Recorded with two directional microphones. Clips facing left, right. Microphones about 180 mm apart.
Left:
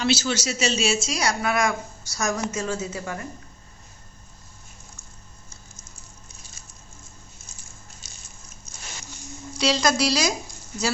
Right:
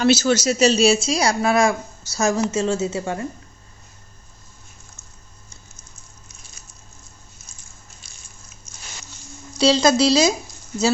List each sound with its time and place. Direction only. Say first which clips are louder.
0.0 s a woman's voice: right 7 dB; 45° right (ahead or behind); by 3.2 s 25° right (ahead or behind)
9.6 s a woman's voice: right 6 dB; 30° right (ahead or behind)